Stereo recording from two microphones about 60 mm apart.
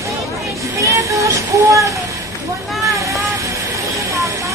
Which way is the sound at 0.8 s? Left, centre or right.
Right.